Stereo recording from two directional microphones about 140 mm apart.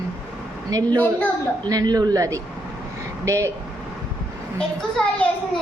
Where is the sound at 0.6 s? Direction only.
25° right (ahead or behind).